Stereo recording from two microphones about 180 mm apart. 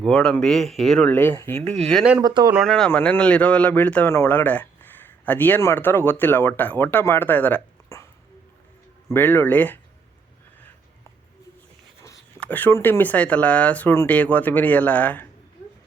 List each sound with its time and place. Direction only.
0.0 s speech: 5° left (ahead or behind)
1.6 s speech: 35° right (ahead or behind)
1.9 s speech: 5° right (ahead or behind)
2.2 s speech: 20° right (ahead or behind)
2.5 s speech: centre (ahead or behind)
9.0 s speech: 10° left (ahead or behind)
12.4 s speech: 10° left (ahead or behind)